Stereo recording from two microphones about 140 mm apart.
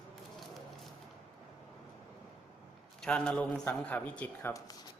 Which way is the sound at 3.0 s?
5° left (ahead or behind).